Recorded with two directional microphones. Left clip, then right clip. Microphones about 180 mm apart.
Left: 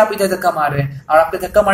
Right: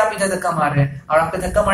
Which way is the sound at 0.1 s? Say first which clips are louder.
Left 4 dB; 40° left (ahead or behind).